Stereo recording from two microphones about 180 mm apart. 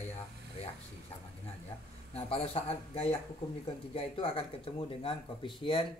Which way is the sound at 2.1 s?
35° left (ahead or behind).